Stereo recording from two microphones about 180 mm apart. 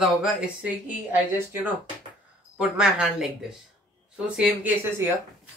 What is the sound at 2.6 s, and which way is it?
Speech, 5° right (ahead or behind).